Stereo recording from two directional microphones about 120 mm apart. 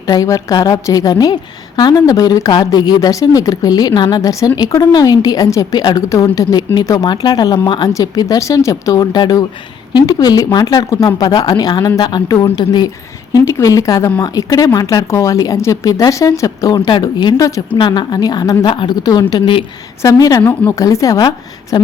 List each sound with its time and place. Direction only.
0.1 s a woman's voice: 30° left (ahead or behind)
13.3 s a woman's voice: 25° left (ahead or behind)